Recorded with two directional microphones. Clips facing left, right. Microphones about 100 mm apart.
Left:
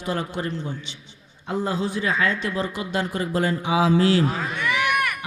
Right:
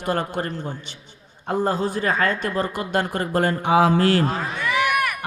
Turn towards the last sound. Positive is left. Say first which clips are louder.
# right 2 dB
turn(degrees=-5)  # may be behind; listen again after turning